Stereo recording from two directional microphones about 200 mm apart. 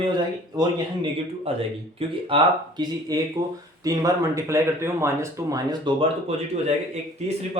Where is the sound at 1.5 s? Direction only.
30° right (ahead or behind).